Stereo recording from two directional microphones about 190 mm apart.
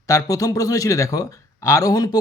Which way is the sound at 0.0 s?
15° left (ahead or behind).